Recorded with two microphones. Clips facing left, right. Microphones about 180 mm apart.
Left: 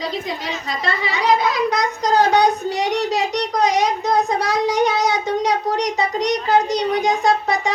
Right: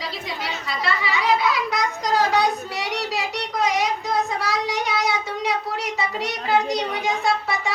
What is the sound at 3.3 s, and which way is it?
A child's voice, 40° left (ahead or behind).